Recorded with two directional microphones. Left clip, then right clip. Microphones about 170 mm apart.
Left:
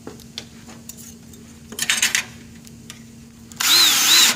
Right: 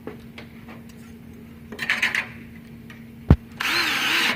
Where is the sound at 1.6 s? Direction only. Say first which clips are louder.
Left 2 dB; 20° left (ahead or behind).